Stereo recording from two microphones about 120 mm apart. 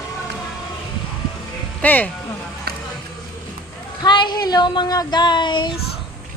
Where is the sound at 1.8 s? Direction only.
15° left (ahead or behind).